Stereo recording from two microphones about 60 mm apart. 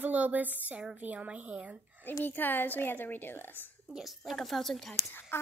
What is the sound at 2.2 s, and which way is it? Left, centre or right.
A woman's voice, left.